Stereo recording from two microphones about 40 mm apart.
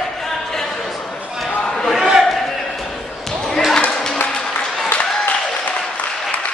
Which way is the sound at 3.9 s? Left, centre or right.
Centre.